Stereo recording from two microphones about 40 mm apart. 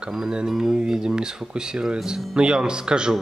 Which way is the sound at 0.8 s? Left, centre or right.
Centre.